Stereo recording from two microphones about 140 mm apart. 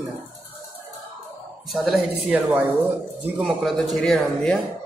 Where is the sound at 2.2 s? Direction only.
10° right (ahead or behind).